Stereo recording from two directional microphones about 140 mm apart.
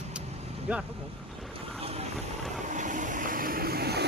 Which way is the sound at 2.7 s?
65° right (ahead or behind).